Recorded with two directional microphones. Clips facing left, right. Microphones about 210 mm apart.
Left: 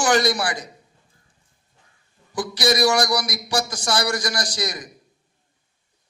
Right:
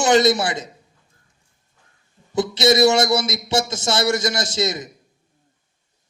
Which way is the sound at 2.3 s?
25° right (ahead or behind).